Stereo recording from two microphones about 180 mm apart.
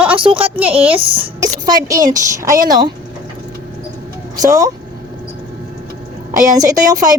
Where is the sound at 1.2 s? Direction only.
20° right (ahead or behind).